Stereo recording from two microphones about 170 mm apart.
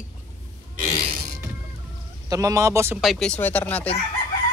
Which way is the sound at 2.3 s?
20° right (ahead or behind).